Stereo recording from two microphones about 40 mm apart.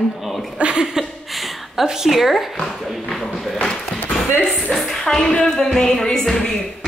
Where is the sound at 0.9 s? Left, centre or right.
Centre.